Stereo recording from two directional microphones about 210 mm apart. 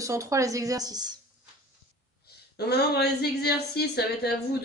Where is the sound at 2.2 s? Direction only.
50° left (ahead or behind).